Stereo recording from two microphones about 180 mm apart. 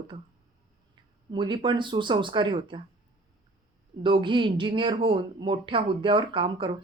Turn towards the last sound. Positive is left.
turn(degrees=-30)  # may be behind; listen again after turning